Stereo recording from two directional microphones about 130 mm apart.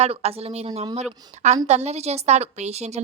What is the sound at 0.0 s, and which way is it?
A woman's voice, 50° right (ahead or behind).